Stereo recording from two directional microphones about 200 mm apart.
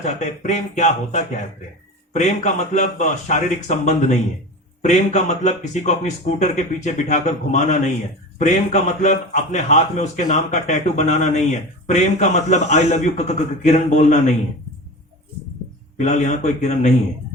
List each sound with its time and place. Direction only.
0.0 s a man's voice: 35° left (ahead or behind)
16.0 s a man's voice: 35° left (ahead or behind)